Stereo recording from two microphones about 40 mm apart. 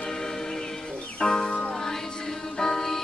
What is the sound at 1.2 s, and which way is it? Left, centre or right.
Music, centre.